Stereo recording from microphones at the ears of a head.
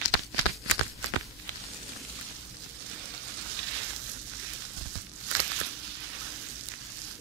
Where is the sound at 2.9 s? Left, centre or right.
Right.